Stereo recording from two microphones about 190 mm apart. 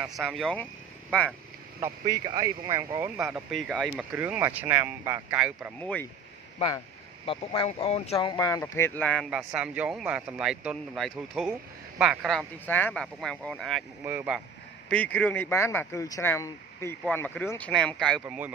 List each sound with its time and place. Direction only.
0.1 s speech: centre (ahead or behind)
1.8 s speech: 20° right (ahead or behind)
3.5 s speech: centre (ahead or behind)
4.1 s speech: 10° right (ahead or behind)
5.8 s speech: 10° left (ahead or behind)
7.2 s speech: 30° left (ahead or behind)
8.3 s speech: 20° left (ahead or behind); by 14.4 s 10° right (ahead or behind)
14.9 s speech: 5° left (ahead or behind)